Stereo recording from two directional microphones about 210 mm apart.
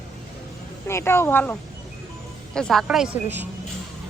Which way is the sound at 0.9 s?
10° left (ahead or behind).